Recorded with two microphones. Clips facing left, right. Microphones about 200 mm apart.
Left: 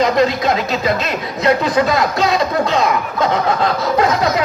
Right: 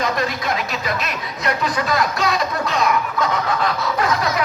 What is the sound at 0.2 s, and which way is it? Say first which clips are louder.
Speech: left 8 dB; 25° left (ahead or behind).